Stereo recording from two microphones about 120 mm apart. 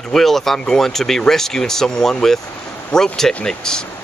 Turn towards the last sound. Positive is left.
turn(degrees=5)  # may be behind; listen again after turning